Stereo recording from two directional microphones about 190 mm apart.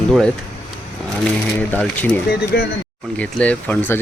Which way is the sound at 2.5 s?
60° left (ahead or behind).